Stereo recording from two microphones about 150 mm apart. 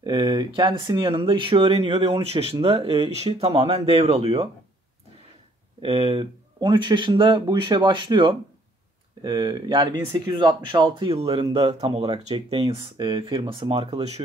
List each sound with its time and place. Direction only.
0.0 s speech: 30° right (ahead or behind)
5.8 s speech: 40° right (ahead or behind)
6.6 s speech: 30° right (ahead or behind)
11.5 s speech: 40° right (ahead or behind)